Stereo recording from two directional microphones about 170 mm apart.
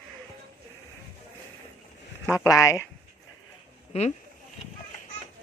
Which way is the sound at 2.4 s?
20° left (ahead or behind).